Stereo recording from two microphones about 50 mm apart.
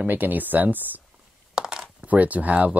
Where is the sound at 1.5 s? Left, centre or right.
Centre.